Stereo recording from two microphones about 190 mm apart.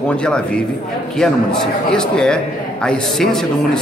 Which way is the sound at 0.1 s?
5° left (ahead or behind).